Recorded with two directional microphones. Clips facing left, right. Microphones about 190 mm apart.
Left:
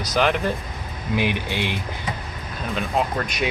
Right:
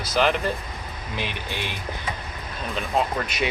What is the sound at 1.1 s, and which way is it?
Speech, 15° left (ahead or behind).